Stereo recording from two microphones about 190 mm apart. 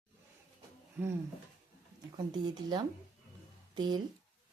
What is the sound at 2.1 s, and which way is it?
Speech, 20° right (ahead or behind).